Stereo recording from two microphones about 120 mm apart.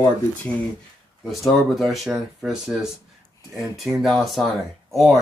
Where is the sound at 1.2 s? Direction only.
Centre (ahead or behind).